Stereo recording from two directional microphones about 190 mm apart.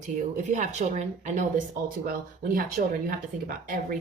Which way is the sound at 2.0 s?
50° right (ahead or behind).